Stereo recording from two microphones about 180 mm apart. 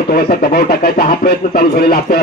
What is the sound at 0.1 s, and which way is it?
Speech, 55° left (ahead or behind).